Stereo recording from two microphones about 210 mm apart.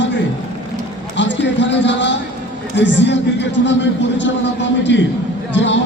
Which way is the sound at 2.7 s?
60° left (ahead or behind).